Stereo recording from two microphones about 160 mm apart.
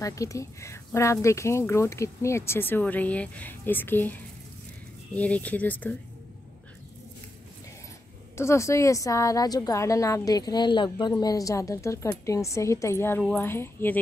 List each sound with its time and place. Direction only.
0.0 s speech: 20° left (ahead or behind)
8.4 s a woman's voice: 15° left (ahead or behind)